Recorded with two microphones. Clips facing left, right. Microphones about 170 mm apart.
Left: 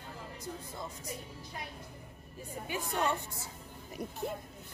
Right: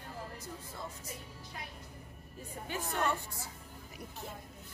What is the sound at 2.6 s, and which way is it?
Speech, 15° left (ahead or behind).